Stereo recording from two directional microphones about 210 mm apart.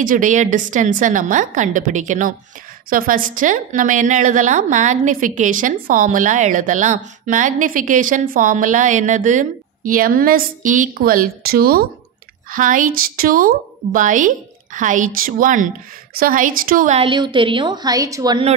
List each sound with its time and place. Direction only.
0.0 s a woman's voice: 40° right (ahead or behind); by 18.5 s 20° right (ahead or behind)